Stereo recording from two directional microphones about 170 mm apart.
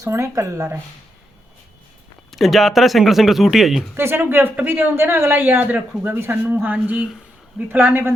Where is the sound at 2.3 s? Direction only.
Centre (ahead or behind).